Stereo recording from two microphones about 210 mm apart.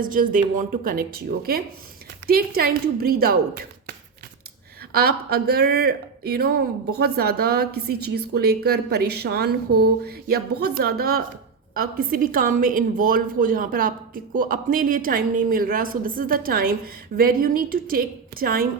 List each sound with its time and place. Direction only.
0.0 s a woman's voice: 40° right (ahead or behind)